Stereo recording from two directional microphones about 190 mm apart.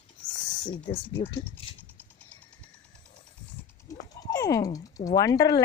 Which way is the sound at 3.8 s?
15° left (ahead or behind).